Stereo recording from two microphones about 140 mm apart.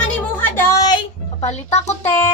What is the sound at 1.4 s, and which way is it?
Speech, 55° left (ahead or behind).